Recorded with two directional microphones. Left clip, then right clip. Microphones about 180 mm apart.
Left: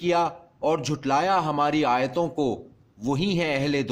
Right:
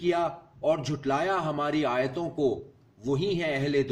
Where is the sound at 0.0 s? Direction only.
55° left (ahead or behind).